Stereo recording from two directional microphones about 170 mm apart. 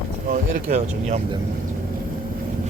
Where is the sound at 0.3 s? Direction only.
45° right (ahead or behind).